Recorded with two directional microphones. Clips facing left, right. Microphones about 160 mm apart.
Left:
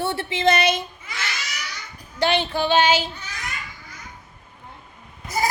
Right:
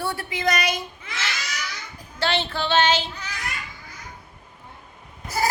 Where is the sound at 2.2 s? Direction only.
15° left (ahead or behind).